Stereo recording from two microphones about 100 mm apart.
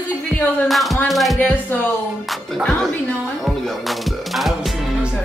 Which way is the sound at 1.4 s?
20° left (ahead or behind).